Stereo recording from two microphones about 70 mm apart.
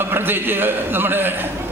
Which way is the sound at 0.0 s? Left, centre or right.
Right.